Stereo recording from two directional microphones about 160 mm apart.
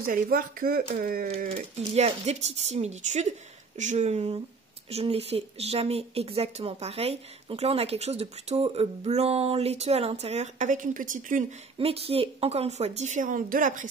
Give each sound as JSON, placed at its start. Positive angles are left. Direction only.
{"t": 0.0, "sound": "speech", "side_deg": -65}
{"t": 1.4, "sound": "speech", "side_deg": -45}
{"t": 11.8, "sound": "speech", "side_deg": -35}